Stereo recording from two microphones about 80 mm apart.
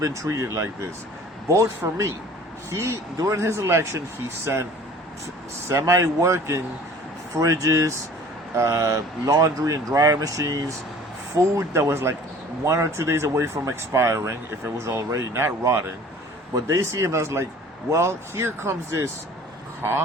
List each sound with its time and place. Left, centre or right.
0.0 s speech: right
5.8 s speech: right